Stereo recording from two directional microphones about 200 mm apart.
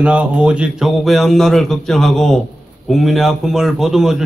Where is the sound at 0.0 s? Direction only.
5° right (ahead or behind).